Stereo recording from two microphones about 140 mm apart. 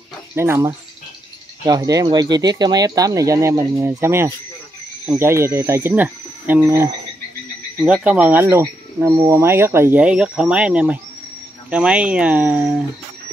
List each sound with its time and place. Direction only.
0.4 s speech: 15° right (ahead or behind)
1.7 s speech: 25° right (ahead or behind)
7.8 s speech: 10° right (ahead or behind)